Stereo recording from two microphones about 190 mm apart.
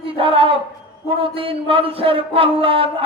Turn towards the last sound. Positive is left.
turn(degrees=-30)  # may be behind; listen again after turning